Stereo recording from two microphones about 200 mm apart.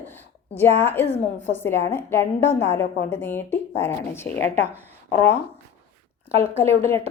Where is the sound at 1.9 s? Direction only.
10° left (ahead or behind).